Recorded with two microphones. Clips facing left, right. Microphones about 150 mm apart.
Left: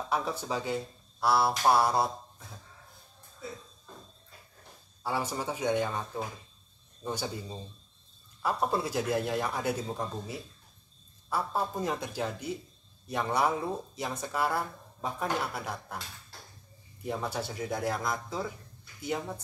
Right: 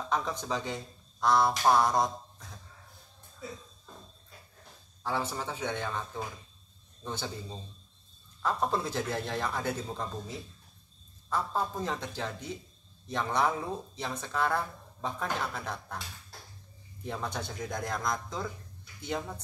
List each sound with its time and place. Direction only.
0.1 s speech: 10° left (ahead or behind)
5.0 s speech: 10° left (ahead or behind)
8.4 s speech: 10° left (ahead or behind)
17.0 s speech: 10° left (ahead or behind)